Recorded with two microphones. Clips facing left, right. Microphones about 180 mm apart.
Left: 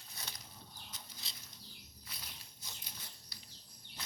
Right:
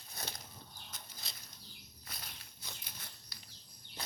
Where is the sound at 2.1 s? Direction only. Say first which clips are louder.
Right 3 dB; 55° right (ahead or behind).